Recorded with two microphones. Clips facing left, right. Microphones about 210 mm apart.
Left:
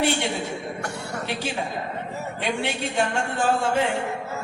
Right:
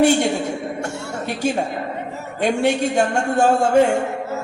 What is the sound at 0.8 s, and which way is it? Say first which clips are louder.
Speech: right 4 dB; 25° right (ahead or behind).